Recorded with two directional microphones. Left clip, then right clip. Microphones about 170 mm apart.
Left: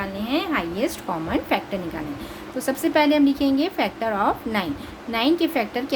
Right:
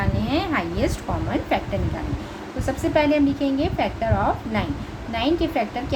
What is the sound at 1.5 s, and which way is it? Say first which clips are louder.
A woman's voice: even; 35° left (ahead or behind).